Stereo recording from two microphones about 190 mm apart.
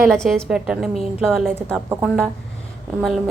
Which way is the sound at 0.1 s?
5° left (ahead or behind).